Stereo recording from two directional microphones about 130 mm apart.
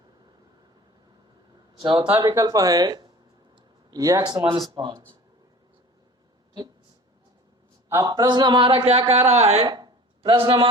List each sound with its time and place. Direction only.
1.8 s speech: 40° right (ahead or behind)
2.2 s speech: 25° right (ahead or behind)
4.2 s speech: 35° right (ahead or behind)
7.9 s speech: 30° right (ahead or behind); by 9.6 s 55° right (ahead or behind)
9.6 s a sound: 30° right (ahead or behind)
10.4 s speech: 35° right (ahead or behind)